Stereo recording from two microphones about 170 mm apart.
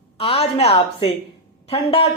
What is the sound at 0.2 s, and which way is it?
A woman's voice, 35° left (ahead or behind).